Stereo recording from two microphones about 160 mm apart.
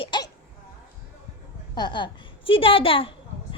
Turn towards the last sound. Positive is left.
turn(degrees=35)  # may be behind; listen again after turning